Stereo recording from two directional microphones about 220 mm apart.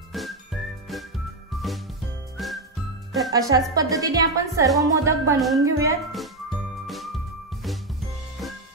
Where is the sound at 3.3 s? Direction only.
15° right (ahead or behind).